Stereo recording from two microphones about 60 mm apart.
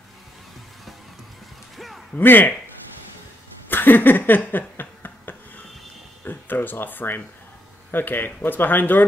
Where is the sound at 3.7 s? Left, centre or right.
Left.